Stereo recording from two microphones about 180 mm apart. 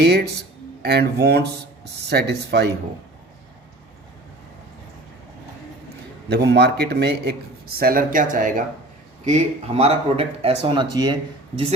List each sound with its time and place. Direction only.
0.0 s speech: 65° right (ahead or behind)
6.2 s speech: 65° right (ahead or behind)
7.8 s speech: 50° right (ahead or behind); by 11.2 s 25° right (ahead or behind)